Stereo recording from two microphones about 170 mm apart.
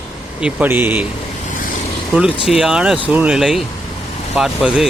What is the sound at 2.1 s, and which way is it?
Speech, 5° right (ahead or behind).